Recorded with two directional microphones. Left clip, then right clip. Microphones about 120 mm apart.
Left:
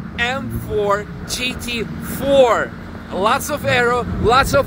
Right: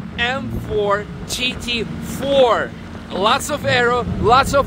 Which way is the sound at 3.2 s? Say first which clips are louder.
Even; 5° right (ahead or behind).